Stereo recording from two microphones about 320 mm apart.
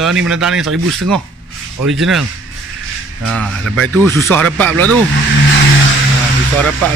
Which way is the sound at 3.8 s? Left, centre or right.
Centre.